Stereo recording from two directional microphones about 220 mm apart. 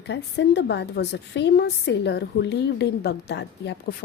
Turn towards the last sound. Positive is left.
turn(degrees=50)  # may be behind; listen again after turning